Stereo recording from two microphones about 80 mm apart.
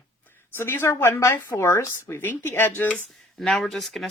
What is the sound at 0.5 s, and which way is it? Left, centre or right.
A woman's voice, left.